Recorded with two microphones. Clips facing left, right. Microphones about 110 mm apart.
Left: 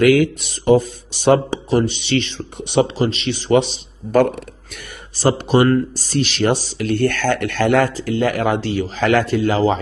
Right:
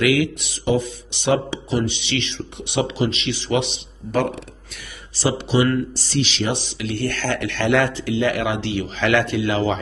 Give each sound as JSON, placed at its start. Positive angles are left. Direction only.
{"t": 0.0, "sound": "a man's voice", "side_deg": 45}